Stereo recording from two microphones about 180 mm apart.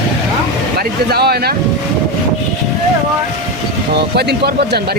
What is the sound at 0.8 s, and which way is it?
Speech, 60° right (ahead or behind).